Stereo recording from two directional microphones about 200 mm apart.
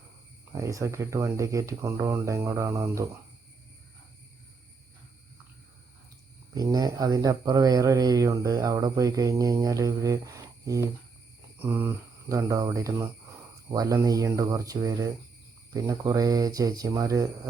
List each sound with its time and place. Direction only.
0.5 s speech: 15° right (ahead or behind)
6.5 s speech: 20° right (ahead or behind)